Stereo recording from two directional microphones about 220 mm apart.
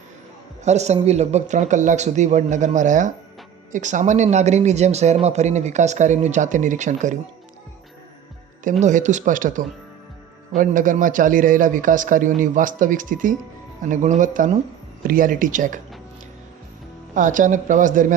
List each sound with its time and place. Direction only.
0.6 s speech: 30° right (ahead or behind)
8.8 s speech: 35° right (ahead or behind)
17.2 s speech: 35° right (ahead or behind)